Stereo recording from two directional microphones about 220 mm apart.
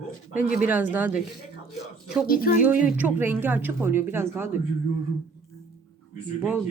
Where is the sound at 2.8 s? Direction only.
10° right (ahead or behind).